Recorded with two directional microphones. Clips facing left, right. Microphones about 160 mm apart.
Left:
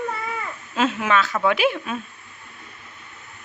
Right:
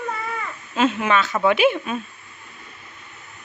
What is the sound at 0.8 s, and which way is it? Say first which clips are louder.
Speech: right 1 dB; centre (ahead or behind).